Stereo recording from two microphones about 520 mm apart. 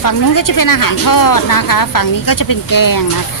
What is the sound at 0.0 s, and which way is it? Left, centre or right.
Speech, left.